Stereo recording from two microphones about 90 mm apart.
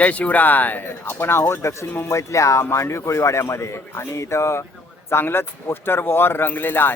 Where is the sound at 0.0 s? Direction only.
15° left (ahead or behind).